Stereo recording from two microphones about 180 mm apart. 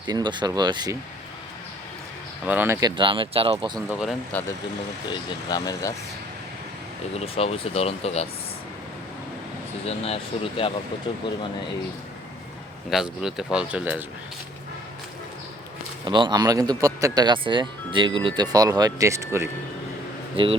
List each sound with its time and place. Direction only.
0.0 s speech: 25° right (ahead or behind)
2.5 s speech: 10° right (ahead or behind)
2.8 s speech: 25° right (ahead or behind)
3.8 s speech: 5° right (ahead or behind)
5.5 s speech: 20° left (ahead or behind)
7.1 s speech: 35° left (ahead or behind)
9.8 s speech: 30° left (ahead or behind)
12.9 s speech: centre (ahead or behind)
16.0 s speech: 25° right (ahead or behind)
20.3 s speech: 30° right (ahead or behind)